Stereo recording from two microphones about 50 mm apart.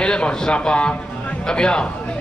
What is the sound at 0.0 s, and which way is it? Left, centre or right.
A man's voice, left.